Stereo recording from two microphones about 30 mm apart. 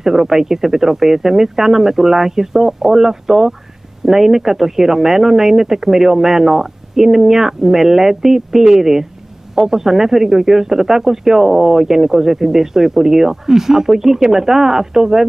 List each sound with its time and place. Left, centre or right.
0.0 s speech: centre